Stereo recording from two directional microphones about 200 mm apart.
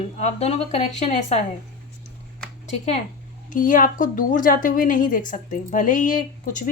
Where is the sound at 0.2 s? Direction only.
35° left (ahead or behind).